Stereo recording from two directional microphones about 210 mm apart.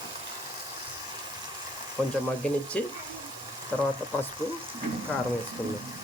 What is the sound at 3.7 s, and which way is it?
Speech, 5° left (ahead or behind).